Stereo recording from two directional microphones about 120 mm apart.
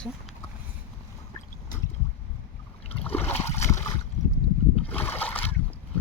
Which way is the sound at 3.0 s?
15° left (ahead or behind).